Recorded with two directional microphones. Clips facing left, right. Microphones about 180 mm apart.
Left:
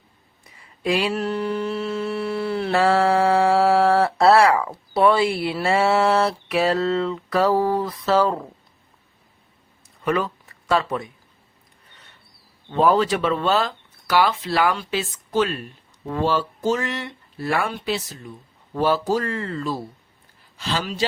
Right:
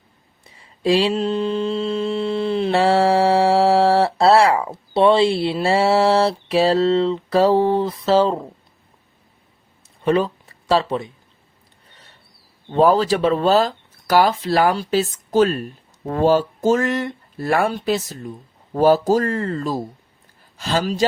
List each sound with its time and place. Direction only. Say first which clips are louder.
0.4 s mantra: right 5 dB; 30° right (ahead or behind)
10.0 s a sound: right 5 dB; 30° right (ahead or behind)
12.7 s speech: right 3 dB; 35° right (ahead or behind)